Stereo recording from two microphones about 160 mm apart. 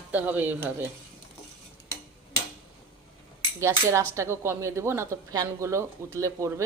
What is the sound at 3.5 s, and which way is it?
Speech, 15° right (ahead or behind).